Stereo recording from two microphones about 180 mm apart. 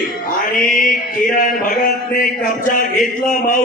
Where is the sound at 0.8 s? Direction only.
50° left (ahead or behind).